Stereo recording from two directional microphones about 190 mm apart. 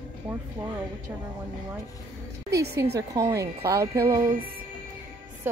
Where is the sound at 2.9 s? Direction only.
15° right (ahead or behind).